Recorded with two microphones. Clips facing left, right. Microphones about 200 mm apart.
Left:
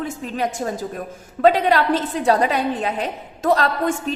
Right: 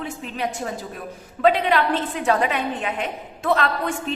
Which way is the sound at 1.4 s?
40° left (ahead or behind).